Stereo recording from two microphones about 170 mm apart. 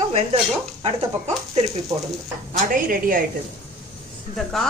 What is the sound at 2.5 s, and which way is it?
Speech, 55° right (ahead or behind).